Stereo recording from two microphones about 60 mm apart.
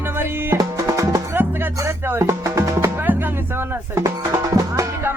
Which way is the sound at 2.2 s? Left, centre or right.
Right.